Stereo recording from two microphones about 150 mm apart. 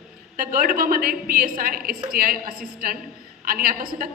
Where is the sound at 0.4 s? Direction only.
75° right (ahead or behind).